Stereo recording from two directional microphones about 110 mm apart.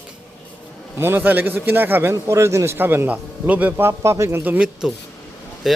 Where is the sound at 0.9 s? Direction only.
20° right (ahead or behind); by 5.8 s 5° right (ahead or behind).